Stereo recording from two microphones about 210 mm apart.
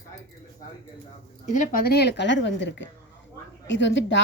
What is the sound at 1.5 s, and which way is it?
A woman's voice, 40° left (ahead or behind).